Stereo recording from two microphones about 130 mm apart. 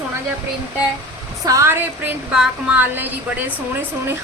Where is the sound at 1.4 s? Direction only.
25° right (ahead or behind).